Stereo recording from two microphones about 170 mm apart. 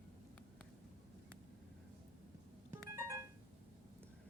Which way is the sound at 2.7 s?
15° right (ahead or behind).